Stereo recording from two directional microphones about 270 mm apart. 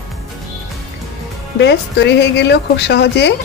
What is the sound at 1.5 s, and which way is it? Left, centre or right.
Speech, left.